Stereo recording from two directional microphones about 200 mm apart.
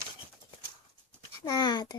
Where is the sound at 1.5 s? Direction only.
20° left (ahead or behind).